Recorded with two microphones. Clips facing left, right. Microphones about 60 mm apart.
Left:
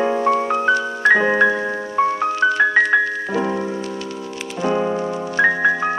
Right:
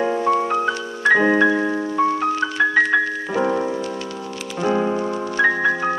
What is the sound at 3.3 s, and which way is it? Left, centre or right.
Music, centre.